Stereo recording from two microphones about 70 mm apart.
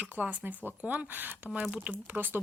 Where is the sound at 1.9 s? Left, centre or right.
Right.